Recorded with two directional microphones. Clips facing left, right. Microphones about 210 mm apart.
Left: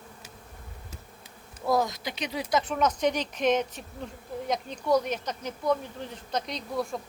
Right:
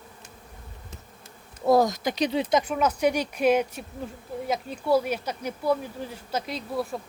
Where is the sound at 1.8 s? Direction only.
45° right (ahead or behind).